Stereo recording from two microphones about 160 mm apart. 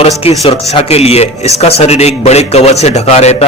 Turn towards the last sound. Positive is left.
turn(degrees=40)  # may be behind; listen again after turning